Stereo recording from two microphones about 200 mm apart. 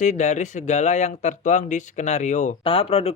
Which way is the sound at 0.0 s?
35° left (ahead or behind).